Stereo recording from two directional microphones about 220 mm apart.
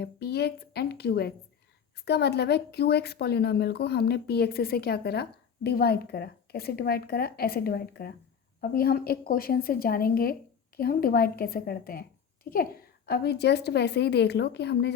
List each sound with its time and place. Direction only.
0.0 s a woman's voice: 50° left (ahead or behind)